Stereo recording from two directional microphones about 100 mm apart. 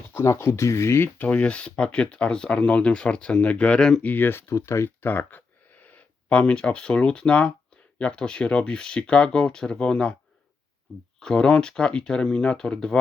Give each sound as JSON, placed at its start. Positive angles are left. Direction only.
{"t": 0.1, "sound": "speech", "side_deg": 25}
{"t": 4.1, "sound": "speech", "side_deg": 20}
{"t": 11.2, "sound": "speech", "side_deg": 5}